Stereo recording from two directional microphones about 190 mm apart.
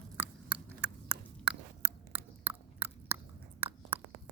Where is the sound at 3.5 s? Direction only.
10° right (ahead or behind).